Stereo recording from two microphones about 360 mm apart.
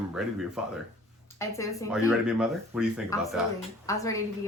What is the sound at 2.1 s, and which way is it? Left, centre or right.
Speech, centre.